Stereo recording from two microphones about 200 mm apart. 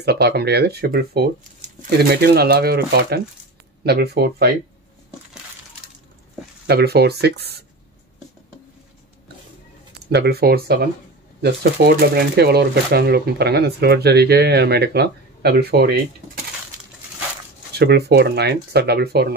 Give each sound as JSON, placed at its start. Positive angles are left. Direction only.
{"t": 0.0, "sound": "speech", "side_deg": -55}
{"t": 6.7, "sound": "speech", "side_deg": -50}
{"t": 10.1, "sound": "speech", "side_deg": -55}
{"t": 17.7, "sound": "speech", "side_deg": -55}